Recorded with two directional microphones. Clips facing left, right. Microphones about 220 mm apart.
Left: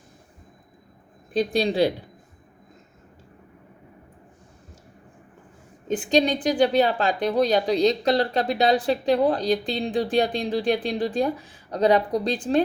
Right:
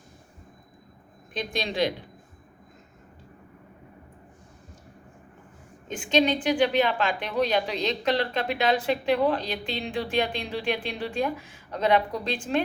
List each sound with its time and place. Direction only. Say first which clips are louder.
1.3 s a woman's voice: left 9 dB; 35° left (ahead or behind)
5.9 s a woman's voice: left 3 dB; 35° left (ahead or behind)